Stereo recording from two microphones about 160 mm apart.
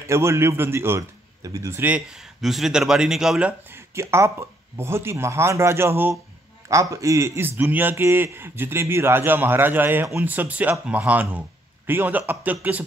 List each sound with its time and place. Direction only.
0.0 s a man's voice: 15° right (ahead or behind)